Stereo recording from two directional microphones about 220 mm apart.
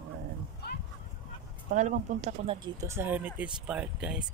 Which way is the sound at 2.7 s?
10° right (ahead or behind).